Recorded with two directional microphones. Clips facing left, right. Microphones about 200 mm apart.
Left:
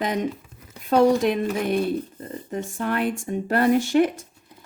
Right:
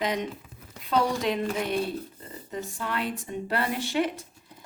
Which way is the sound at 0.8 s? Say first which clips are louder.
Left 8 dB; 50° left (ahead or behind).